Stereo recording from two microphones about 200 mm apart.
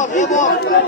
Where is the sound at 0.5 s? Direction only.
55° left (ahead or behind).